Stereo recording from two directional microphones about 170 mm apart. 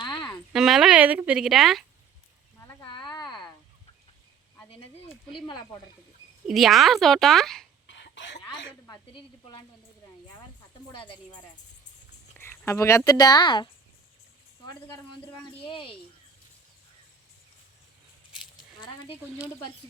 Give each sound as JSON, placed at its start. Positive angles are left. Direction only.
{"t": 0.0, "sound": "a sound", "side_deg": 25}
{"t": 0.5, "sound": "speech", "side_deg": 0}
{"t": 2.8, "sound": "a sound", "side_deg": 30}
{"t": 5.5, "sound": "speech", "side_deg": 25}
{"t": 6.5, "sound": "a woman's voice", "side_deg": 0}
{"t": 7.9, "sound": "cough", "side_deg": 90}
{"t": 9.1, "sound": "speech", "side_deg": 30}
{"t": 12.4, "sound": "a sound", "side_deg": 15}
{"t": 13.1, "sound": "speech", "side_deg": 25}
{"t": 15.4, "sound": "a woman's voice", "side_deg": 30}